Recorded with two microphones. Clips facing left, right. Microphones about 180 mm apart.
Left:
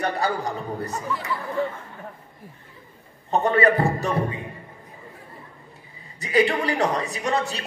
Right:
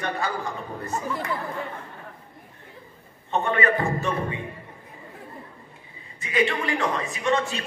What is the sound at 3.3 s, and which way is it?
Speech, 35° left (ahead or behind).